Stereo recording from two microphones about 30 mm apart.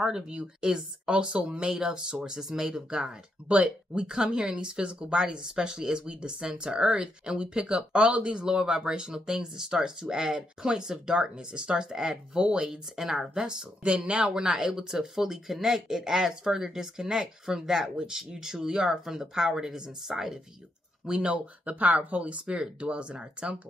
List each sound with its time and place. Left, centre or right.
0.0 s speech: right
1.0 s speech: right; by 2.8 s centre
2.9 s speech: right
12.6 s speech: centre
13.8 s speech: right
14.2 s speech: right
21.1 s speech: right
21.6 s speech: right
22.8 s speech: right